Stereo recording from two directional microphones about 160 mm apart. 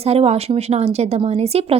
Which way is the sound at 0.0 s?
40° right (ahead or behind).